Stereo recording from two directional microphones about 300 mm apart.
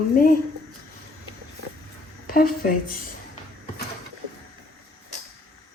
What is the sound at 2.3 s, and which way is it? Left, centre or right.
Speech, left.